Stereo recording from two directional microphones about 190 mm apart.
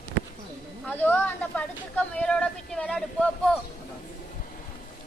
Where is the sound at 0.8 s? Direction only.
10° left (ahead or behind).